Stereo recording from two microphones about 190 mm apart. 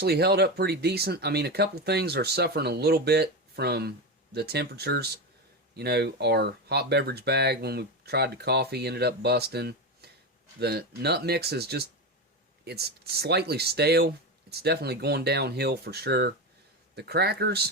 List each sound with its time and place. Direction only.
0.0 s speech: 55° right (ahead or behind)